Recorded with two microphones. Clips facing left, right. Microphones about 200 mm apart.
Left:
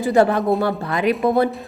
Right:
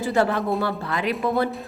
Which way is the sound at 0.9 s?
15° left (ahead or behind).